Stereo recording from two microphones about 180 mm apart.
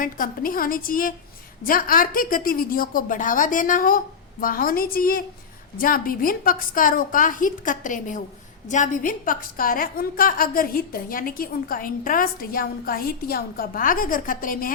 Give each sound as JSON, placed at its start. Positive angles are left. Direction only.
{"t": 0.0, "sound": "a woman's voice", "side_deg": 50}